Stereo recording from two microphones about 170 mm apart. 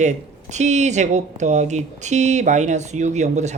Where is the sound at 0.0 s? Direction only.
45° right (ahead or behind).